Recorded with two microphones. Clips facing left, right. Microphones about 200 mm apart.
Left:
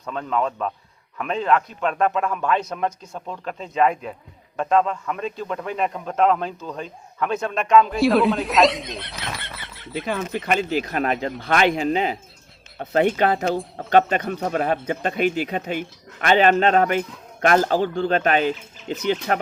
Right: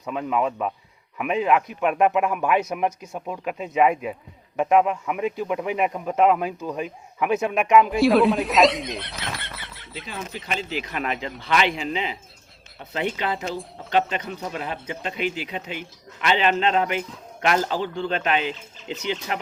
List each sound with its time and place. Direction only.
0.0 s a man's voice: 10° right (ahead or behind)
7.9 s speech: centre (ahead or behind)
10.4 s speech: 55° left (ahead or behind)